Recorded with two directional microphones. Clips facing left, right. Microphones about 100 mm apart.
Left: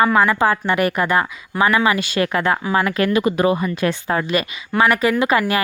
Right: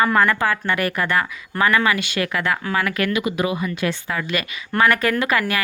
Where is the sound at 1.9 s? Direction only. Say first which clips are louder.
Left 4 dB; 35° left (ahead or behind).